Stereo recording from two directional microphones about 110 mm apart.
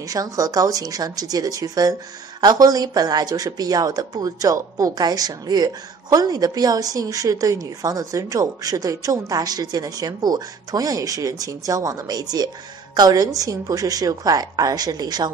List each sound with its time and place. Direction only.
0.1 s speech: 30° right (ahead or behind)